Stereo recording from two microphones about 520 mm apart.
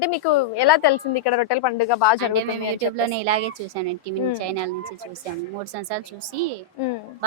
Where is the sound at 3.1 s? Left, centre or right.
Right.